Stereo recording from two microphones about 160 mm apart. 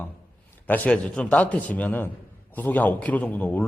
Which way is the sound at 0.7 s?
10° left (ahead or behind).